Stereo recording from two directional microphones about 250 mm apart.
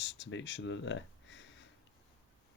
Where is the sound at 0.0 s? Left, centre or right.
Left.